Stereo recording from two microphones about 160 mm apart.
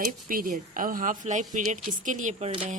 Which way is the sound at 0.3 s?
60° right (ahead or behind).